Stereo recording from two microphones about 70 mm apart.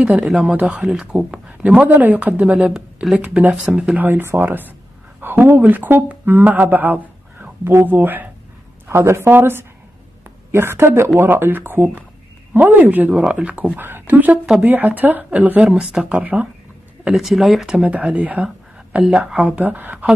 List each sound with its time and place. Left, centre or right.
0.5 s speech: centre
0.8 s speech: centre
1.8 s speech: right
2.6 s speech: centre
4.0 s speech: right
8.8 s a woman's voice: right
15.7 s speech: centre
17.1 s speech: centre
17.8 s speech: centre